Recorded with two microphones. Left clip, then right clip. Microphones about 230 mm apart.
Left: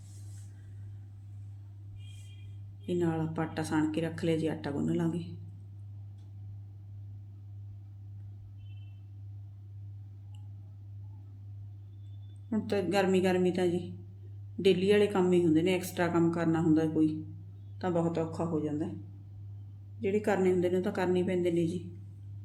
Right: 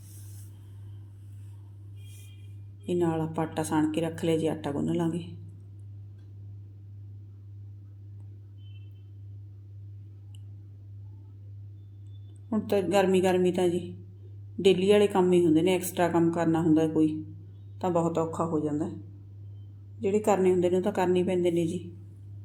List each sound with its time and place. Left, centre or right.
2.8 s a woman's voice: centre
12.5 s a woman's voice: centre
14.6 s a woman's voice: centre
20.0 s a woman's voice: centre